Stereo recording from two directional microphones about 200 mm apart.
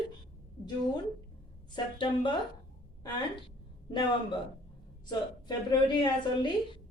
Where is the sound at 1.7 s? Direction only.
25° left (ahead or behind).